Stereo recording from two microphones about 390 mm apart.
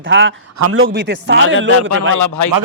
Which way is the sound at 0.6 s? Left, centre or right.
Right.